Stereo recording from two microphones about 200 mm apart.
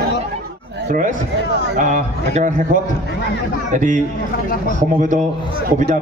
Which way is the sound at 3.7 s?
40° right (ahead or behind).